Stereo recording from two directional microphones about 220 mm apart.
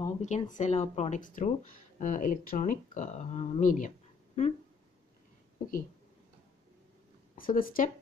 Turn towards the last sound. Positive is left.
turn(degrees=40)  # may be behind; listen again after turning